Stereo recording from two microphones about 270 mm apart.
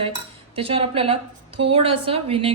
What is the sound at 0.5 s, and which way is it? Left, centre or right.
A woman's voice, centre.